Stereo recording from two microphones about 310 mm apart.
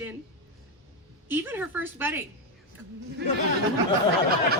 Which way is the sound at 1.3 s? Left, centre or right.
Centre.